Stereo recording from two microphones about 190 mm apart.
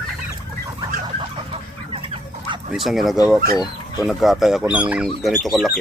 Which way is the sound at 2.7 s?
Centre (ahead or behind).